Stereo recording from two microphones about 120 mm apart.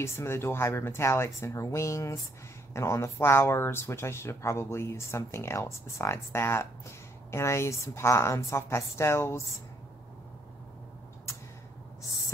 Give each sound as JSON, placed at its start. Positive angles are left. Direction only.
{"t": 0.0, "sound": "speech", "side_deg": 20}